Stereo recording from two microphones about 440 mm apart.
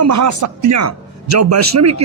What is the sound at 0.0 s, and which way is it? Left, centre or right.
A man's voice, right.